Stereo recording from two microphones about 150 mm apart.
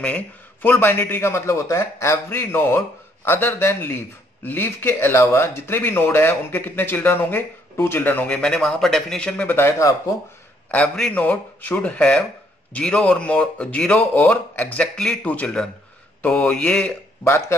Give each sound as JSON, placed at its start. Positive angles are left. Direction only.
{"t": 0.0, "sound": "speech", "side_deg": 10}